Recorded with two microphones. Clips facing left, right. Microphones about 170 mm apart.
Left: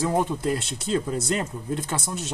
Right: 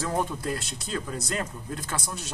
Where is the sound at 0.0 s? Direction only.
20° left (ahead or behind).